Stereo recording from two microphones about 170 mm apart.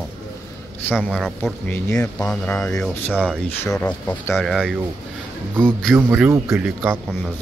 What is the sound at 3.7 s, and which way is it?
Speech, 10° left (ahead or behind).